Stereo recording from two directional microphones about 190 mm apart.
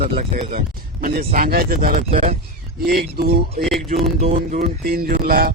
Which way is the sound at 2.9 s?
55° right (ahead or behind).